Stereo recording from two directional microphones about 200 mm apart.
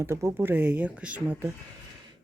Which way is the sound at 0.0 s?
15° right (ahead or behind).